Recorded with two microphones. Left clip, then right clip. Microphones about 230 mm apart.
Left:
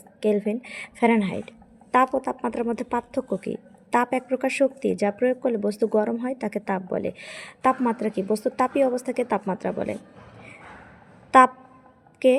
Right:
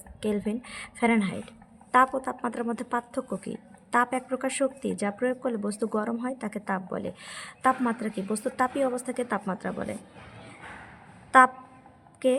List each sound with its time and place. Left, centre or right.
0.2 s a woman's voice: centre
11.3 s a sound: centre
12.2 s speech: centre